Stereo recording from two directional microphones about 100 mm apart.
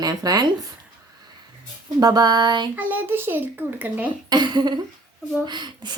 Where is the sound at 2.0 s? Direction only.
45° right (ahead or behind).